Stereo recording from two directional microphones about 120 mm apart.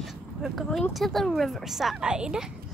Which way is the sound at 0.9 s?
Centre (ahead or behind).